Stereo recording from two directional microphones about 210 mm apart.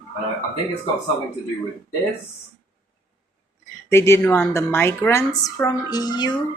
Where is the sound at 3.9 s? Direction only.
10° left (ahead or behind).